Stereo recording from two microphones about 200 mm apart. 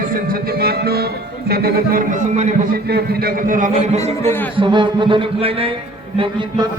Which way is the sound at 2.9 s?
50° right (ahead or behind).